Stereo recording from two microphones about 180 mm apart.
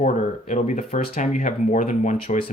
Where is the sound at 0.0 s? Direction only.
40° left (ahead or behind).